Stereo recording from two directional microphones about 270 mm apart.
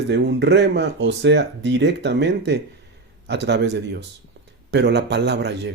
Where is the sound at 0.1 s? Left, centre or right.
Right.